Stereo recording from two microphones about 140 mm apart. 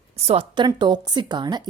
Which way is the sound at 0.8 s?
30° right (ahead or behind).